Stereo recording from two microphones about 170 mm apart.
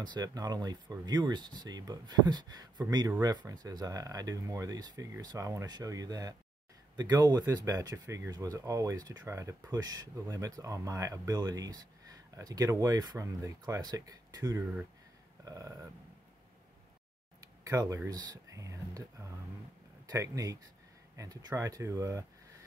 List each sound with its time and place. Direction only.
0.0 s speech: 25° right (ahead or behind)
17.6 s speech: 20° right (ahead or behind)